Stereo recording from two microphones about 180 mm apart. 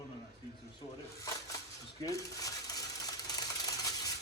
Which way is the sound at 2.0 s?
20° left (ahead or behind).